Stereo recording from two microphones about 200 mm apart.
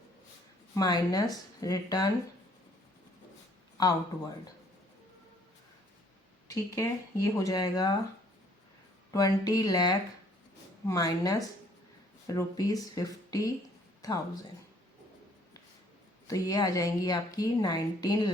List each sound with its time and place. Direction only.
0.7 s speech: 20° left (ahead or behind)
3.8 s speech: 20° left (ahead or behind)
6.5 s speech: 15° left (ahead or behind)
9.1 s speech: 15° left (ahead or behind)
16.2 s speech: 15° left (ahead or behind)